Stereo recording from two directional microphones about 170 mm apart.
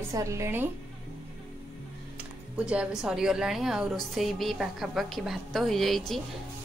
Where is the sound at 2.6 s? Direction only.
5° right (ahead or behind).